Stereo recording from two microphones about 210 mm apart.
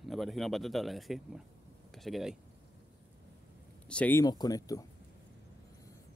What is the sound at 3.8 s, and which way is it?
Speech, 5° left (ahead or behind).